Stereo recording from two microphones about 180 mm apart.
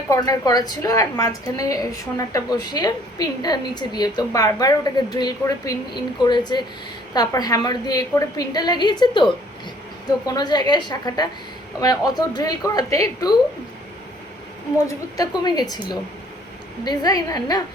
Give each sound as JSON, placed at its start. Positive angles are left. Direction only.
{"t": 0.1, "sound": "a woman's voice", "side_deg": 20}
{"t": 10.2, "sound": "a woman's voice", "side_deg": 20}
{"t": 14.8, "sound": "a woman's voice", "side_deg": 20}